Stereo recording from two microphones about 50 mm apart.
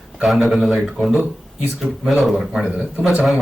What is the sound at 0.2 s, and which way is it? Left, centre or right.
A man's voice, centre.